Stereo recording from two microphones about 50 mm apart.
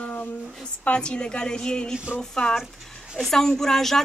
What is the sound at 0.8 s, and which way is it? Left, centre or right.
Speech, centre.